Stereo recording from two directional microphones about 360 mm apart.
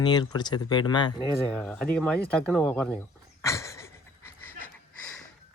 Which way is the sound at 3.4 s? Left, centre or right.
Centre.